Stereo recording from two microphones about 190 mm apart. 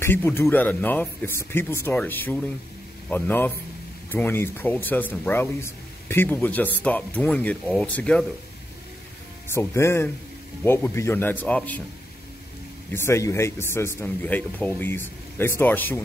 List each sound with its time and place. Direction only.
0.0 s speech: 10° left (ahead or behind)
9.5 s speech: 15° left (ahead or behind)
12.9 s speech: 15° left (ahead or behind)